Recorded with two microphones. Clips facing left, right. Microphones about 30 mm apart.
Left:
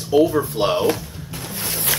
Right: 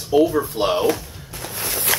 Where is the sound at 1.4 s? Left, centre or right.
Right.